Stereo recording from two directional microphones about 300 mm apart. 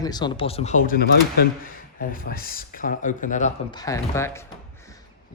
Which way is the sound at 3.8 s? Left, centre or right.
Centre.